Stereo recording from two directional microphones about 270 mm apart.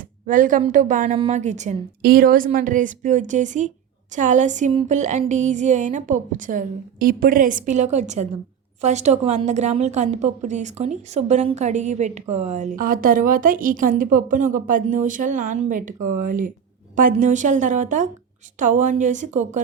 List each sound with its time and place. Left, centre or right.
0.3 s speech: right
16.0 s speech: right
16.2 s speech: right